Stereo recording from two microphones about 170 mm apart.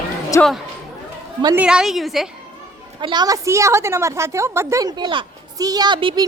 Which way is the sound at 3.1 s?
25° right (ahead or behind).